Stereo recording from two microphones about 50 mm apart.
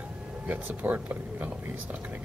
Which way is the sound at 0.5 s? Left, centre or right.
Right.